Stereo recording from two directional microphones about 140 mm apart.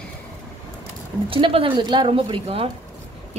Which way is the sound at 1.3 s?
40° right (ahead or behind).